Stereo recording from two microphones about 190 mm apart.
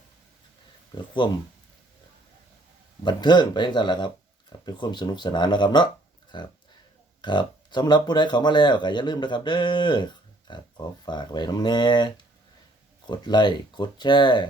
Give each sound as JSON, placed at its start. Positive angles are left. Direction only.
{"t": 1.2, "sound": "speech", "side_deg": 25}
{"t": 3.0, "sound": "speech", "side_deg": 25}